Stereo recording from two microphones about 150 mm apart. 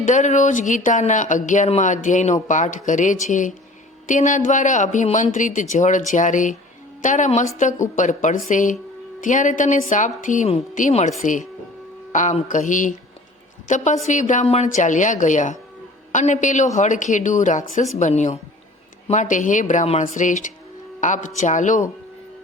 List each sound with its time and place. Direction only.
0.0 s speech: 55° left (ahead or behind)